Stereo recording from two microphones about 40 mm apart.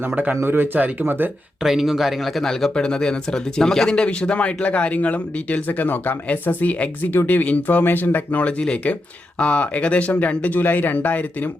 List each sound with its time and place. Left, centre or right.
0.4 s speech: right
1.6 s a man's voice: centre
2.7 s speech: centre; by 7.8 s left
7.8 s speech: left
9.4 s speech: left
10.6 s speech: left